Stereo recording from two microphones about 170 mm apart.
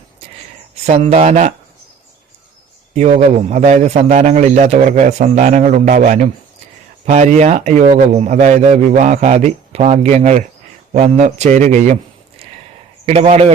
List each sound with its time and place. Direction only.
0.9 s speech: 35° right (ahead or behind)
2.9 s a man's voice: 40° right (ahead or behind)
13.1 s speech: 40° right (ahead or behind)